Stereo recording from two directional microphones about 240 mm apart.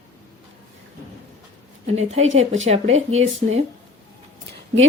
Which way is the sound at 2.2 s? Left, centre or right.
Right.